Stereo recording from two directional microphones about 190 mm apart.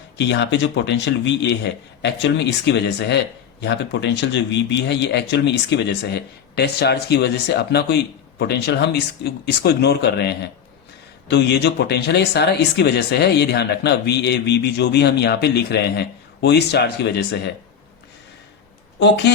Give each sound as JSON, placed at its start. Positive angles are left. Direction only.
{"t": 0.2, "sound": "speech", "side_deg": 70}
{"t": 18.9, "sound": "speech", "side_deg": 70}